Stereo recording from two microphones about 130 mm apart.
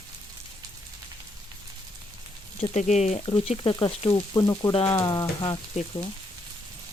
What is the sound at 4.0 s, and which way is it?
Speech, 40° left (ahead or behind).